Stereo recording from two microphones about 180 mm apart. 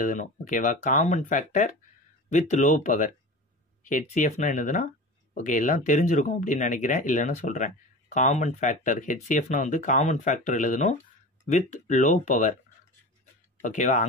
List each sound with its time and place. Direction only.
0.0 s speech: 45° left (ahead or behind)
13.6 s speech: 45° left (ahead or behind)